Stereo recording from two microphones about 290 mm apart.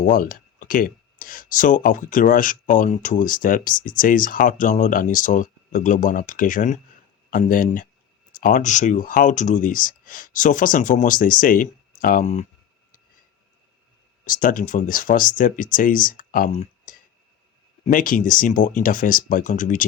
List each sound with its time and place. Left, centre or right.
0.0 s speech: left
14.3 s speech: left